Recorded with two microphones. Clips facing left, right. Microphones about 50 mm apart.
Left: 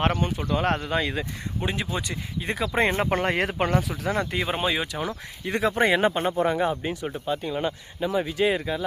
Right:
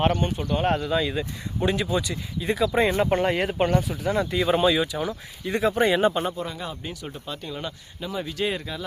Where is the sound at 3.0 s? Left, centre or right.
Left.